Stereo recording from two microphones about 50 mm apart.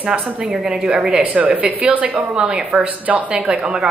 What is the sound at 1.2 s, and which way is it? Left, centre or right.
Speech, right.